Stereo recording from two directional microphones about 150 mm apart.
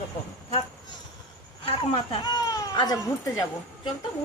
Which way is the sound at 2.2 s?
25° left (ahead or behind).